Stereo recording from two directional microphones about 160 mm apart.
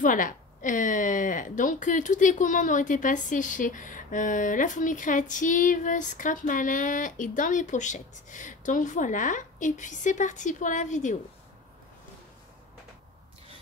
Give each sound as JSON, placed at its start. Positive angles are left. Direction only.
{"t": 0.0, "sound": "a woman's voice", "side_deg": 55}